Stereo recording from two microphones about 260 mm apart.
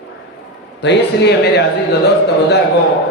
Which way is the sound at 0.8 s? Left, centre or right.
Left.